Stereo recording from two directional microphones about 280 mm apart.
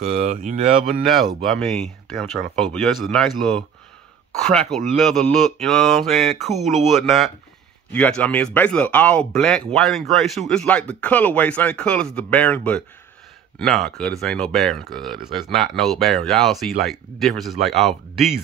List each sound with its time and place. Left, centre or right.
0.1 s speech: right
1.0 s speech: centre